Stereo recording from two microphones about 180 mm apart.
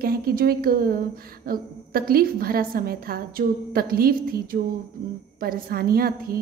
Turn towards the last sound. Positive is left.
turn(degrees=-55)  # may be behind; listen again after turning